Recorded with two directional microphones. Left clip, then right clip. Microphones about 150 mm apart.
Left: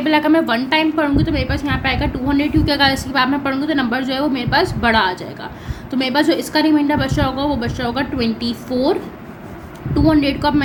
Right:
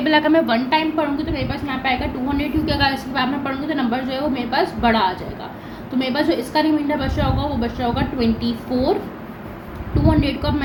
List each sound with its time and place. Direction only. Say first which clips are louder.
0.0 s a woman's voice: left 1 dB; 25° left (ahead or behind); by 9.0 s 90° left
10.1 s a woman's voice: left 4 dB; 90° left